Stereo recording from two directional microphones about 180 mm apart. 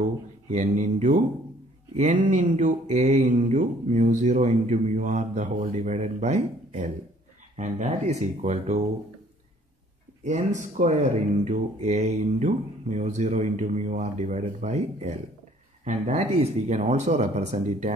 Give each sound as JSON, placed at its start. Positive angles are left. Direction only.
{"t": 0.5, "sound": "mantra", "side_deg": -40}
{"t": 10.6, "sound": "mantra", "side_deg": -45}